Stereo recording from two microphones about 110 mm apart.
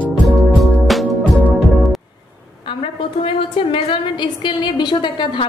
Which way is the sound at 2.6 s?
55° left (ahead or behind).